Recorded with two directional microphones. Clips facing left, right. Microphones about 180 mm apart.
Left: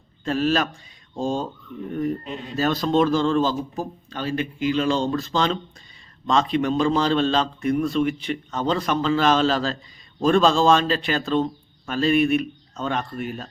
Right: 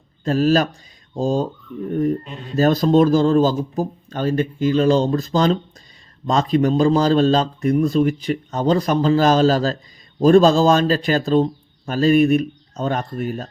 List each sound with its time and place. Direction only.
0.3 s speech: 40° right (ahead or behind)
2.6 s speech: 40° right (ahead or behind)